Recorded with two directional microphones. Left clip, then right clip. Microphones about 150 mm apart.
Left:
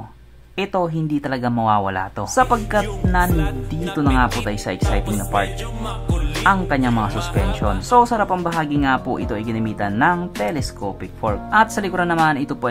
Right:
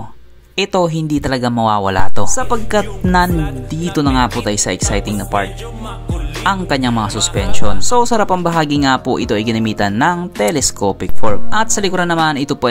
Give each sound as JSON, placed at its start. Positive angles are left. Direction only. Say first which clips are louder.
{"t": 0.6, "sound": "speech", "louder": "right 6 dB", "side_deg": -30}
{"t": 1.7, "sound": "speech", "louder": "right 2 dB", "side_deg": -45}
{"t": 2.1, "sound": "speech", "louder": "left 1 dB", "side_deg": -30}
{"t": 3.3, "sound": "music", "louder": "right 3 dB", "side_deg": 0}
{"t": 3.9, "sound": "speech", "louder": "right 4 dB", "side_deg": -35}
{"t": 4.9, "sound": "speech", "louder": "right 3 dB", "side_deg": -40}
{"t": 7.8, "sound": "speech", "louder": "right 1 dB", "side_deg": -35}
{"t": 8.5, "sound": "speech", "louder": "right 4 dB", "side_deg": -45}